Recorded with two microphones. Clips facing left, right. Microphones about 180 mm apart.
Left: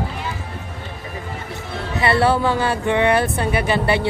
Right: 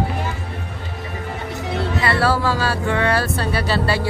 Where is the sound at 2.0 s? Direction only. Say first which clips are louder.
Left 4 dB; 25° left (ahead or behind).